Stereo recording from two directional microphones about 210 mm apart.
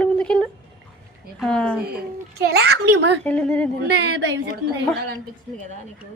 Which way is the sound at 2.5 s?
50° right (ahead or behind).